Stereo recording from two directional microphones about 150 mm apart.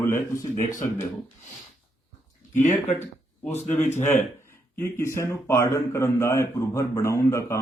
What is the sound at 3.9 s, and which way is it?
A man's voice, 15° left (ahead or behind).